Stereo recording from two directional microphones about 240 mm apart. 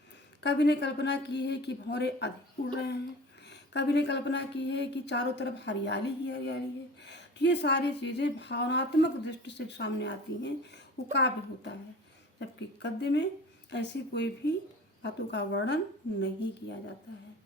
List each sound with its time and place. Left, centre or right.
0.4 s a woman's voice: left
3.5 s a woman's voice: left